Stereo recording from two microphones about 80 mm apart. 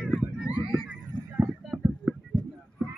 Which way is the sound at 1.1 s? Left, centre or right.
Right.